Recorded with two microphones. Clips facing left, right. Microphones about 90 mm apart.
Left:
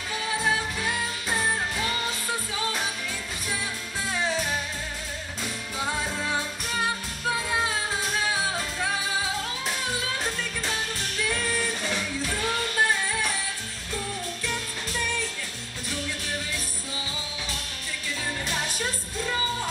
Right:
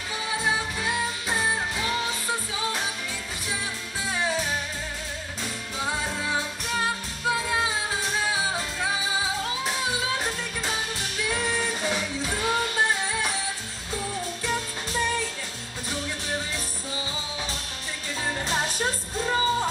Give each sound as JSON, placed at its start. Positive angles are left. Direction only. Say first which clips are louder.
{"t": 0.4, "sound": "music", "louder": "even", "side_deg": -5}
{"t": 4.1, "sound": "music", "louder": "right 1 dB", "side_deg": -5}
{"t": 10.1, "sound": "music", "louder": "right 1 dB", "side_deg": -10}
{"t": 14.4, "sound": "music", "louder": "right 3 dB", "side_deg": -25}
{"t": 18.4, "sound": "music", "louder": "right 5 dB", "side_deg": -30}